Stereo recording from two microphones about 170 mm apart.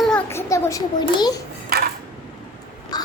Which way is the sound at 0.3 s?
15° left (ahead or behind).